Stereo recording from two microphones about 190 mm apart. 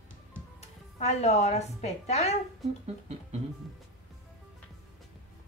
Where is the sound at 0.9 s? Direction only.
35° left (ahead or behind).